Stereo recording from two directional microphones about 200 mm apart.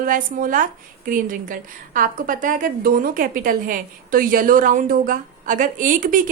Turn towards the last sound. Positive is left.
turn(degrees=-40)  # may be behind; listen again after turning